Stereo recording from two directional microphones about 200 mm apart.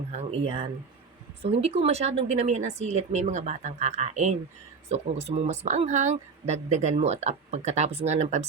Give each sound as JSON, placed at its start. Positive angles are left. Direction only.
{"t": 0.1, "sound": "speech", "side_deg": -30}